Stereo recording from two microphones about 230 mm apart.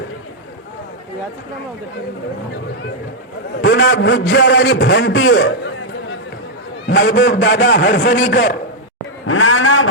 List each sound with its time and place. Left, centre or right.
3.6 s a man's voice: left
6.8 s a sound: left
7.2 s a man's voice: left
9.2 s a man's voice: left